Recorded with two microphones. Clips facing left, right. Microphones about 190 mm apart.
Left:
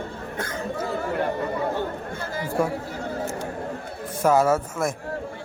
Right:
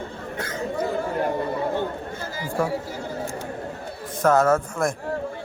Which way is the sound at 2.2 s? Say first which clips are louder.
Left 2 dB; 55° left (ahead or behind).